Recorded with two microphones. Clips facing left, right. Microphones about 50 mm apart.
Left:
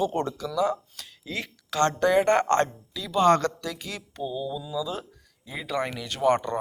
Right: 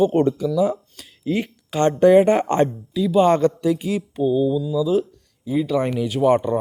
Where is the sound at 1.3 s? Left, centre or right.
Right.